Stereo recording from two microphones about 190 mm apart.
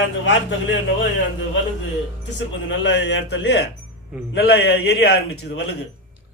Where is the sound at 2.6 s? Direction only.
65° left (ahead or behind).